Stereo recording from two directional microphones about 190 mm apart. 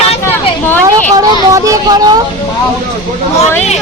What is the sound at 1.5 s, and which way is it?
Speech, 15° right (ahead or behind).